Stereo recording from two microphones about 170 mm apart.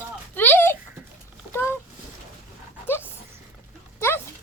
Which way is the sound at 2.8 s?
15° left (ahead or behind).